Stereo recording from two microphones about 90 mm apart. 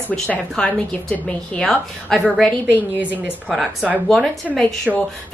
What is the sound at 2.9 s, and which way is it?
Speech, 20° right (ahead or behind).